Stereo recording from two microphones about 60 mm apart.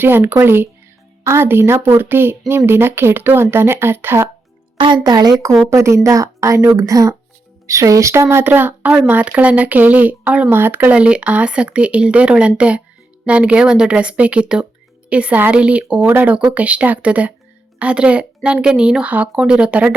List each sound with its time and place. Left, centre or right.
0.0 s speech: right
5.1 s speech: right
5.7 s speech: right
8.4 s speech: right
10.5 s a woman's voice: right; by 19.9 s centre